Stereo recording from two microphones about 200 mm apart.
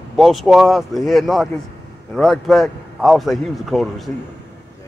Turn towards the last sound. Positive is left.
turn(degrees=0)  # may be behind; listen again after turning